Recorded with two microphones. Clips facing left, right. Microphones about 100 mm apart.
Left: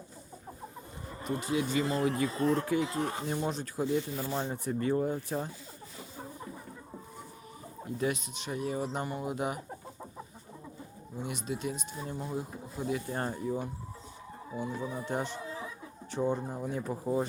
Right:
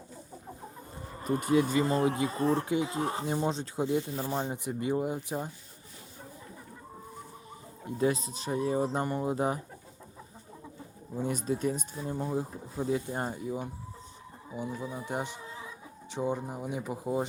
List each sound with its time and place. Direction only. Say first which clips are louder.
1.2 s speech: right 5 dB; 45° right (ahead or behind)
2.0 s speech: right 1 dB; 20° right (ahead or behind)
7.9 s speech: right 4 dB; 30° right (ahead or behind)
11.2 s speech: right 5 dB; 40° right (ahead or behind)
13.1 s speech: left 1 dB; 15° right (ahead or behind)